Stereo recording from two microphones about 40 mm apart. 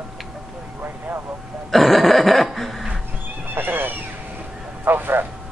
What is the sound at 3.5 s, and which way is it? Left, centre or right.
Neigh, right.